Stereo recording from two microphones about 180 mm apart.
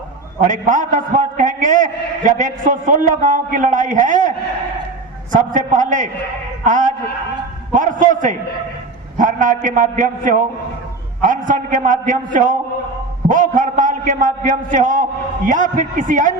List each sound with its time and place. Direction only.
0.4 s a man's voice: 45° right (ahead or behind)